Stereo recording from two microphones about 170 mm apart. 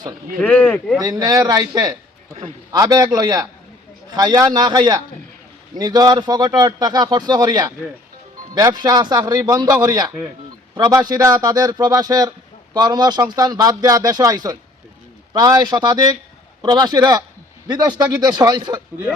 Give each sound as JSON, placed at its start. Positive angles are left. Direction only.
{"t": 0.4, "sound": "speech", "side_deg": 10}
{"t": 0.9, "sound": "speech", "side_deg": -20}